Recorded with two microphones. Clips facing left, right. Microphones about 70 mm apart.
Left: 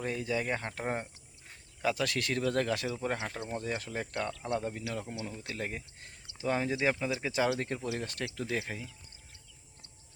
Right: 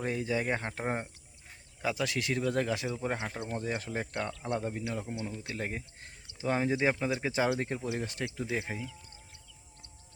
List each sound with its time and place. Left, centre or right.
0.0 s speech: right
3.2 s speech: centre
3.8 s speech: right